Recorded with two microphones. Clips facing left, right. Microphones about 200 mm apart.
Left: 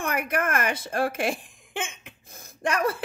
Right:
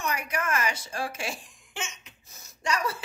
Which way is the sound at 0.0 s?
55° left (ahead or behind).